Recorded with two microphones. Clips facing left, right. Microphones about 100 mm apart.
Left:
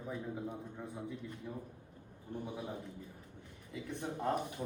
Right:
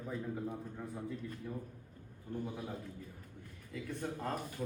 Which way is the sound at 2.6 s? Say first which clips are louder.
Left 1 dB; 20° left (ahead or behind).